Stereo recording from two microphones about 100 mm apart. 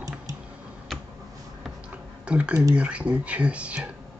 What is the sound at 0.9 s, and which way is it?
Tick-tock, 5° left (ahead or behind).